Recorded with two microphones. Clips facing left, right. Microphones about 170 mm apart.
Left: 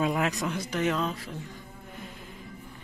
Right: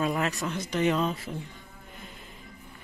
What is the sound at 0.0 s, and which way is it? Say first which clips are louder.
Speech: left 1 dB; 15° left (ahead or behind).